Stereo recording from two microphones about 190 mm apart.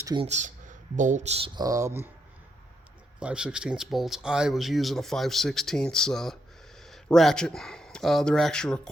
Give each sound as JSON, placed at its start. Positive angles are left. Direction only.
{"t": 0.0, "sound": "speech", "side_deg": -20}
{"t": 0.3, "sound": "speech", "side_deg": -40}
{"t": 1.5, "sound": "speech", "side_deg": -20}
{"t": 3.2, "sound": "speech", "side_deg": -5}